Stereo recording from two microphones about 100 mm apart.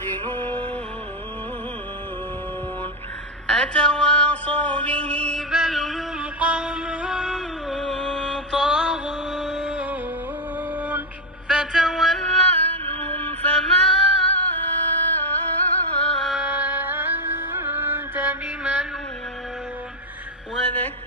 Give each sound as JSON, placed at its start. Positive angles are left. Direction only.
{"t": 0.1, "sound": "music", "side_deg": 15}
{"t": 3.4, "sound": "a sound", "side_deg": 5}
{"t": 5.5, "sound": "music", "side_deg": -5}
{"t": 10.8, "sound": "music", "side_deg": -15}
{"t": 11.5, "sound": "music", "side_deg": -5}
{"t": 16.3, "sound": "music", "side_deg": -15}
{"t": 20.7, "sound": "a sound", "side_deg": 15}